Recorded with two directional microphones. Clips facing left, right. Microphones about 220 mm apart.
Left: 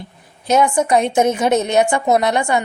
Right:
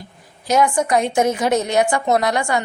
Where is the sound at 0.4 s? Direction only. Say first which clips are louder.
Left 2 dB; 25° left (ahead or behind).